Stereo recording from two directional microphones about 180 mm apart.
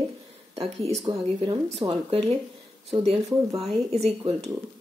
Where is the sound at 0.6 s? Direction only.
35° right (ahead or behind).